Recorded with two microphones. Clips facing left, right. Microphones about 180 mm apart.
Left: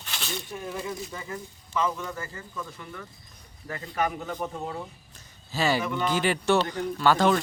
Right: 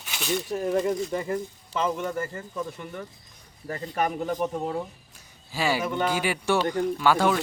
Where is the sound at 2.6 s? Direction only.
30° right (ahead or behind).